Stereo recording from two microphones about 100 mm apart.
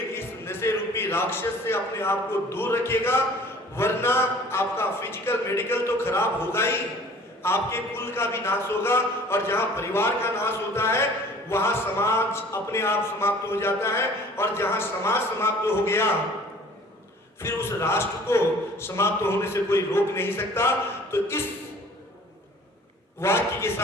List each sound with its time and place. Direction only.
0.1 s a man's voice: 25° left (ahead or behind)
17.4 s speech: 25° left (ahead or behind)
23.2 s speech: 25° left (ahead or behind)